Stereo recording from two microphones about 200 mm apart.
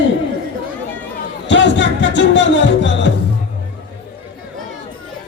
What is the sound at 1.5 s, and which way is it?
A man's voice, 65° left (ahead or behind).